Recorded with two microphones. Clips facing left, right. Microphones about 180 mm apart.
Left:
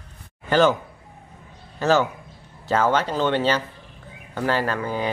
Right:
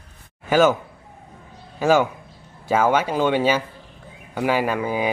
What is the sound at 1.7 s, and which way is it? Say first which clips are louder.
A man's voice: right 2 dB; 10° right (ahead or behind).